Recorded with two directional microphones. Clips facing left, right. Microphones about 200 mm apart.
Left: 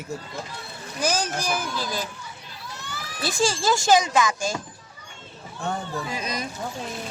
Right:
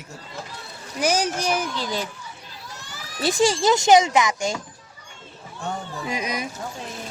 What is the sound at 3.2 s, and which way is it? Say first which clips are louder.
Speech: right 4 dB; 20° right (ahead or behind).